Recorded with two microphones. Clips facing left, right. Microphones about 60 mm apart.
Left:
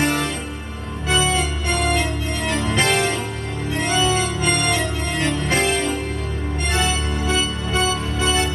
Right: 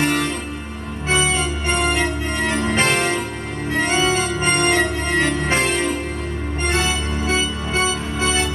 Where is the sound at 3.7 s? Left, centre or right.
Right.